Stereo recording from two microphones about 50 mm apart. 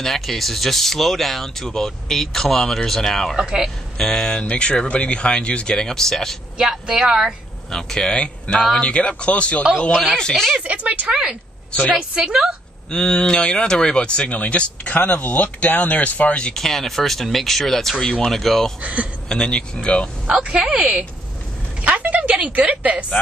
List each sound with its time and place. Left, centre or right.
0.0 s speech: centre
3.3 s speech: centre
4.0 s speech: centre
6.6 s speech: centre
7.7 s speech: centre
10.6 s speech: right
12.2 s speech: centre
12.9 s speech: centre
16.5 s speech: centre
18.8 s speech: right
19.2 s speech: centre
20.4 s speech: right